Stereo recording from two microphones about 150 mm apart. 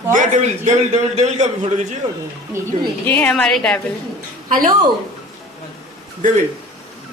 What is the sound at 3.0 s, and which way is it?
Speech, 10° left (ahead or behind).